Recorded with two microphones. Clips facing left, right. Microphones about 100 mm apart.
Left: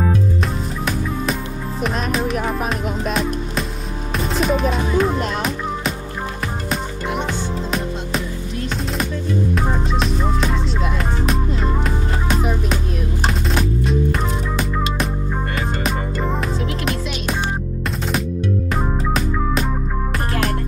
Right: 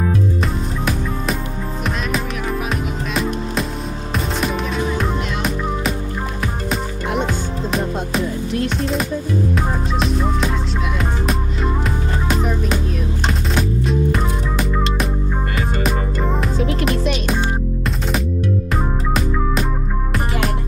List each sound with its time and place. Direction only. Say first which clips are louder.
2.7 s music: left 1 dB; centre (ahead or behind)
6.7 s music: right 1 dB; centre (ahead or behind)
9.6 s music: even; centre (ahead or behind)
18.7 s music: even; centre (ahead or behind)